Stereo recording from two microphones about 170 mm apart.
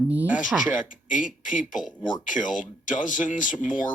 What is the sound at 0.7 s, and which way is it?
Speech, 50° left (ahead or behind).